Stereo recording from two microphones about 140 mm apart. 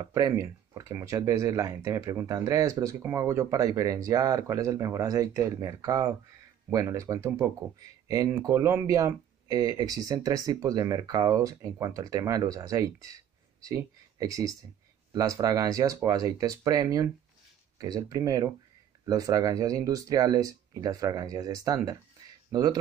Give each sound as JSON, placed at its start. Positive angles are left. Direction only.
{"t": 0.0, "sound": "speech", "side_deg": -25}